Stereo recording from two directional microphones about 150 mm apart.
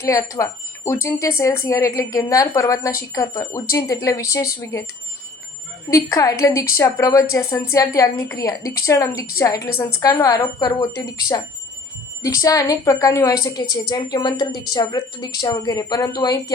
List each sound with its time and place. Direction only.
0.0 s speech: 20° left (ahead or behind)
5.9 s speech: 20° left (ahead or behind)